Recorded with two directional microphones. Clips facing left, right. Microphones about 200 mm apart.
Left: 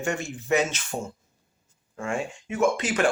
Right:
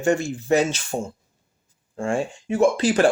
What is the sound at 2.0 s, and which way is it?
Speech, 30° right (ahead or behind).